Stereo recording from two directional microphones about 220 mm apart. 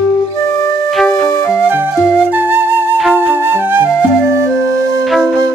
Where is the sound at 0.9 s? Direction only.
Centre (ahead or behind).